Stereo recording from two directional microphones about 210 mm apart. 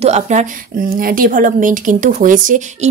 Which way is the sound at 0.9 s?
45° right (ahead or behind).